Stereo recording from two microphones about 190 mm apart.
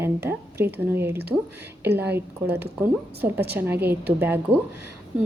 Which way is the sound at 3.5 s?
10° right (ahead or behind).